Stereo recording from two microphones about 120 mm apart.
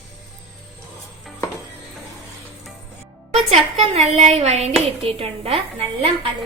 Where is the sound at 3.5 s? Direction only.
60° right (ahead or behind).